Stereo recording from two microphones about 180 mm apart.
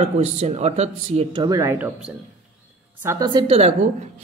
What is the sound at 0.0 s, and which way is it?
Speech, 40° right (ahead or behind).